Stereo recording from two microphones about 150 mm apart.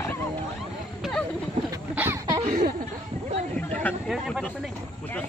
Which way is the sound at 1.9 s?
15° right (ahead or behind).